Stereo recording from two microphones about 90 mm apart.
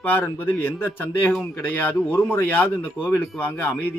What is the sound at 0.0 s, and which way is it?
A man's voice, 20° left (ahead or behind).